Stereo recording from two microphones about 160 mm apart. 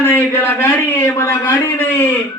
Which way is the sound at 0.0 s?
15° left (ahead or behind).